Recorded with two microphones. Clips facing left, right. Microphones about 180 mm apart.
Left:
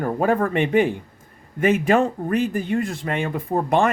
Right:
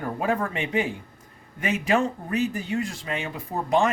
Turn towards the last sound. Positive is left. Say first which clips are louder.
# left 3 dB
turn(degrees=55)  # may be behind; listen again after turning